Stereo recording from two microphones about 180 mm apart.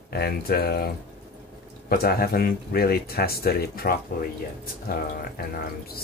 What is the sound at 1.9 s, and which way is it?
Speech, 60° left (ahead or behind).